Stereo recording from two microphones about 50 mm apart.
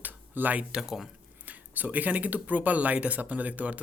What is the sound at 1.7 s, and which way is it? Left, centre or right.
Speech, right.